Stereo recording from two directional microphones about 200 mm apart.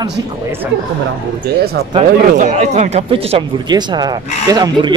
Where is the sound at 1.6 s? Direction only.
50° right (ahead or behind).